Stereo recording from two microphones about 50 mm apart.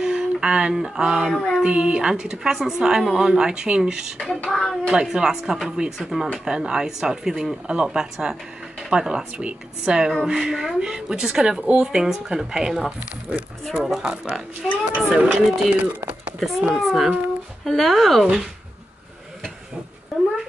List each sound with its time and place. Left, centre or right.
0.0 s speech: centre
1.3 s a sound: centre
1.6 s speech: centre
4.6 s speech: centre
5.0 s speech: centre
14.6 s speech: centre
15.0 s speech: right
16.7 s speech: centre
20.1 s cat: centre